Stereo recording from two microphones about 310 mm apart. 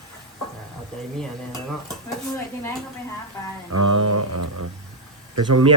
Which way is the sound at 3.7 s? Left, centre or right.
Right.